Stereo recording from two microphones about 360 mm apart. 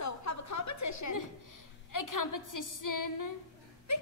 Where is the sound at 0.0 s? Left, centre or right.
Left.